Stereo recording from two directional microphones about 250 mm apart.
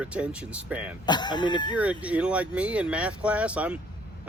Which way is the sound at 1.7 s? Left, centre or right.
Centre.